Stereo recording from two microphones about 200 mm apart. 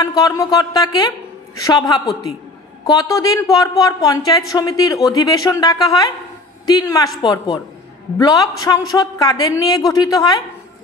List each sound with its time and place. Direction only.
0.0 s a man's voice: 20° left (ahead or behind)